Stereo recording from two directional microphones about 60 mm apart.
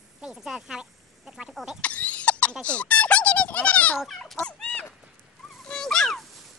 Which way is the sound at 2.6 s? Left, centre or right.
Left.